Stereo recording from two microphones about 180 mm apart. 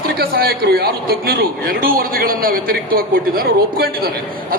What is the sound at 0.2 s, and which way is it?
A man's voice, 55° right (ahead or behind).